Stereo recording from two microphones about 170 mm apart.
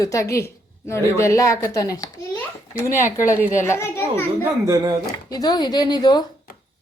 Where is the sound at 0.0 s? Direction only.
20° left (ahead or behind).